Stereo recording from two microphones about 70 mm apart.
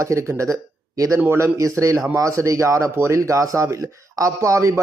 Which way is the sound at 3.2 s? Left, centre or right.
Right.